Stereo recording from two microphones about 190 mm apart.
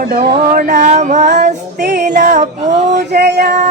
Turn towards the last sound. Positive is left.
turn(degrees=-60)  # may be behind; listen again after turning